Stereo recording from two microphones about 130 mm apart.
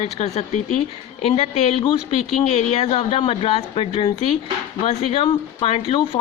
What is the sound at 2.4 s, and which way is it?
Speech, 55° left (ahead or behind).